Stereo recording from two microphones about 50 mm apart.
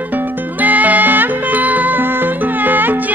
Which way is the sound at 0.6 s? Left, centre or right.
Right.